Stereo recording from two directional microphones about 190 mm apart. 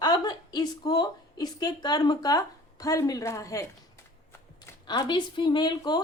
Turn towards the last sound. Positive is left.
turn(degrees=20)  # may be behind; listen again after turning